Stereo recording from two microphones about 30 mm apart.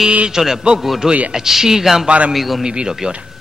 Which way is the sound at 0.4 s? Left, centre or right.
Right.